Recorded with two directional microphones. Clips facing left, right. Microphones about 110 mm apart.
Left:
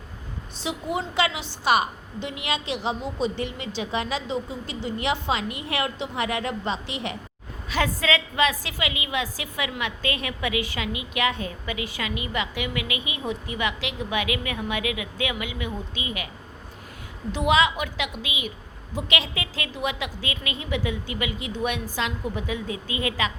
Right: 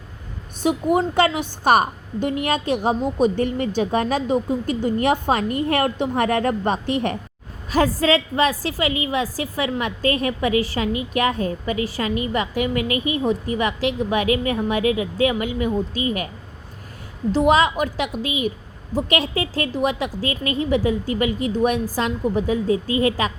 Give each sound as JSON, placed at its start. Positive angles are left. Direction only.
{"t": 0.6, "sound": "a woman's voice", "side_deg": -50}
{"t": 7.7, "sound": "a woman's voice", "side_deg": -40}
{"t": 17.3, "sound": "a woman's voice", "side_deg": -40}